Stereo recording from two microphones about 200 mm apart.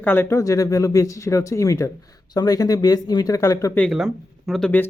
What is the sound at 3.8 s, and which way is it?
Speech, centre (ahead or behind).